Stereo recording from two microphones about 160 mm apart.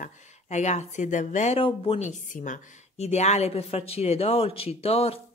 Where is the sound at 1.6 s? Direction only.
35° left (ahead or behind).